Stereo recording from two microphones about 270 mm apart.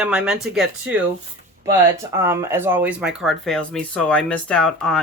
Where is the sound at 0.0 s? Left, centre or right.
Centre.